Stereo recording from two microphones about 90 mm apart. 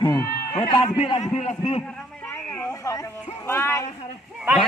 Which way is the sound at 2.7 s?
40° left (ahead or behind).